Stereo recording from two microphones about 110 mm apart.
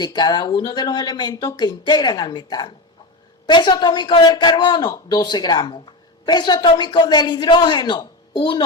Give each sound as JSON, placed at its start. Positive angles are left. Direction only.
{"t": 0.0, "sound": "speech", "side_deg": 40}